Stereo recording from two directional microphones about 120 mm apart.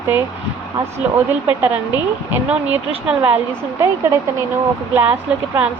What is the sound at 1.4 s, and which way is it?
A woman's voice, 15° right (ahead or behind).